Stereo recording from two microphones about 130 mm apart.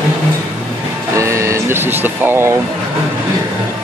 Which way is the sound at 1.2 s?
25° right (ahead or behind).